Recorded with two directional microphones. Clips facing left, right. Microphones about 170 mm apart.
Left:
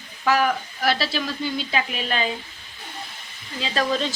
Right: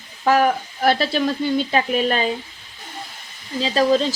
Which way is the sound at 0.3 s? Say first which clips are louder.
Right 4 dB; 45° right (ahead or behind).